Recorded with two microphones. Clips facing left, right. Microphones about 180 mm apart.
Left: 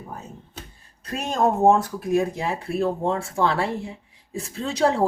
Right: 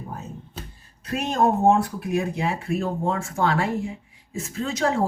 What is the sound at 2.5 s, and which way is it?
Speech, 35° left (ahead or behind).